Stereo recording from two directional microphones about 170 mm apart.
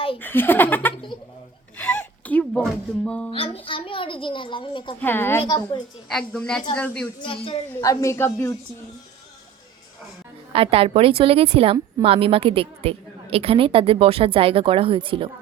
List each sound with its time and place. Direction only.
0.2 s speech: 10° left (ahead or behind)
1.8 s music: 10° left (ahead or behind)
3.2 s speech: 35° left (ahead or behind)
4.9 s speech: 10° left (ahead or behind)
5.4 s a woman's voice: 25° left (ahead or behind)
6.1 s a woman's voice: 5° left (ahead or behind)
7.2 s speech: 30° left (ahead or behind)
7.8 s speech: 20° left (ahead or behind)
10.5 s a woman's voice: 35° right (ahead or behind)